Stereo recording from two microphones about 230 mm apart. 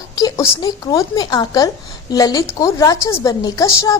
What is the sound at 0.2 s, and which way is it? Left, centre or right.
Speech, centre.